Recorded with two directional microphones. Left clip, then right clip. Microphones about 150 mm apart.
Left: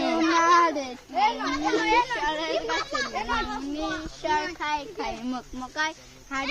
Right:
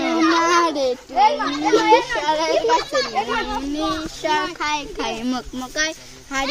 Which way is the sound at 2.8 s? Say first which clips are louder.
Right 7 dB; 20° right (ahead or behind).